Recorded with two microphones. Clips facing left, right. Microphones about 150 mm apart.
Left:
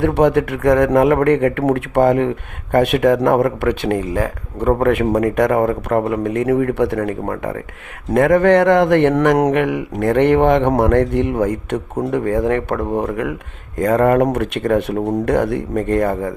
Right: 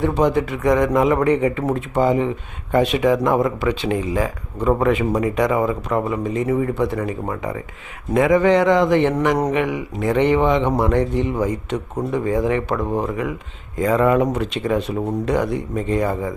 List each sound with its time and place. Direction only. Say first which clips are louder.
0.0 s a man's voice: left 4 dB; 65° left (ahead or behind)